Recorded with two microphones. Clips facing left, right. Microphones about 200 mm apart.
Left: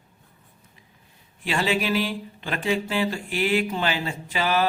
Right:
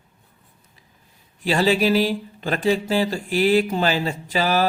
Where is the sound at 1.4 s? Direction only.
35° right (ahead or behind).